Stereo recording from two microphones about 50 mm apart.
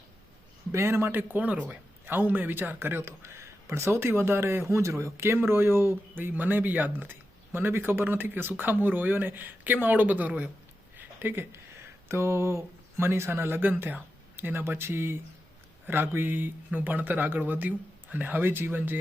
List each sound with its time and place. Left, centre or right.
0.7 s speech: right
1.1 s speech: right
2.0 s speech: right
6.3 s speech: right
10.9 s a sound: right
12.0 s speech: right